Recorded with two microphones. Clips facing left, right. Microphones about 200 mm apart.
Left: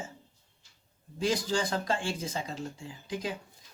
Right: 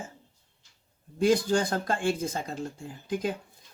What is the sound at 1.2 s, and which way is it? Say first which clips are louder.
Speech: right 6 dB; 55° right (ahead or behind).